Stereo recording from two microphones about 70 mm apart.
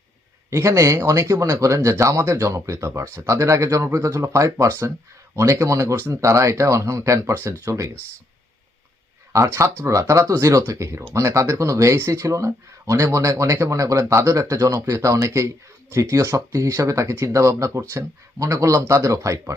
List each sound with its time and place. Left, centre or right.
0.5 s speech: right
9.8 s speech: right